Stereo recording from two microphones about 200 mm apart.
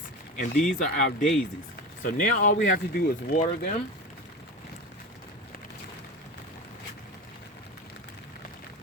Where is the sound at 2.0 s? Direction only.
40° left (ahead or behind).